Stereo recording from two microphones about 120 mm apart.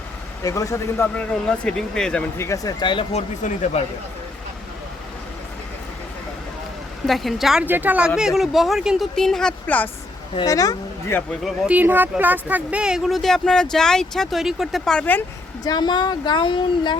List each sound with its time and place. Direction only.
0.4 s speech: 25° left (ahead or behind); by 2.2 s 5° left (ahead or behind)
2.4 s speech: 25° left (ahead or behind)
2.8 s speech: 40° left (ahead or behind)
3.1 s speech: 80° left
7.1 s speech: centre (ahead or behind)
7.6 s speech: 15° right (ahead or behind); by 9.9 s 15° left (ahead or behind)
10.4 s speech: 30° left (ahead or behind)
11.1 s speech: 20° left (ahead or behind)
11.4 s speech: 10° right (ahead or behind); by 15.2 s 10° left (ahead or behind)
15.6 s speech: 35° left (ahead or behind)